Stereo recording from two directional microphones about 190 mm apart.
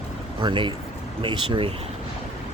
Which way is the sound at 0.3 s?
25° right (ahead or behind).